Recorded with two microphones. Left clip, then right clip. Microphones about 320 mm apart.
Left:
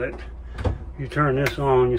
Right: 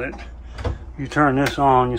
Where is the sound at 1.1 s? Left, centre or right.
Centre.